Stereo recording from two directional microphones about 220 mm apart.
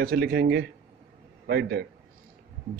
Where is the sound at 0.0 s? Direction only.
45° right (ahead or behind).